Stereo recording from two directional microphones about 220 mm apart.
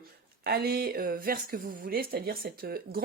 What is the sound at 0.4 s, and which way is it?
Speech, 45° right (ahead or behind).